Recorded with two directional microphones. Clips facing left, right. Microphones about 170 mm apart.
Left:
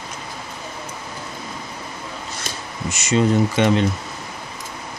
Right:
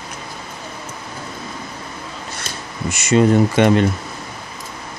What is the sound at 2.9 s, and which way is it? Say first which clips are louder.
Speech: right 4 dB; 55° right (ahead or behind).